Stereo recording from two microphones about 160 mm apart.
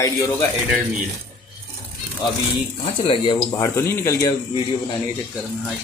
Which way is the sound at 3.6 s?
15° left (ahead or behind).